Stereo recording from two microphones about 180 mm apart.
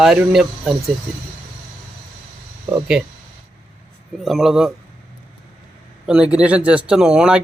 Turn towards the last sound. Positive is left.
turn(degrees=-5)  # may be behind; listen again after turning